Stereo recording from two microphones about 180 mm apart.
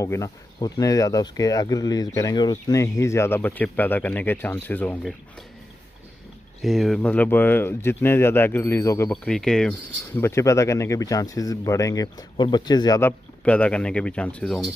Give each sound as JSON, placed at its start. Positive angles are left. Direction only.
{"t": 0.0, "sound": "speech", "side_deg": 15}
{"t": 6.6, "sound": "speech", "side_deg": 0}
{"t": 9.1, "sound": "speech", "side_deg": 5}
{"t": 13.4, "sound": "speech", "side_deg": 5}